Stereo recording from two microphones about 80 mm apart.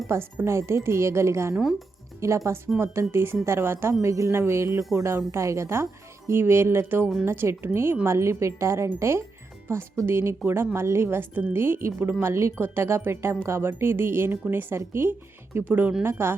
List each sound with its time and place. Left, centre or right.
0.1 s a woman's voice: right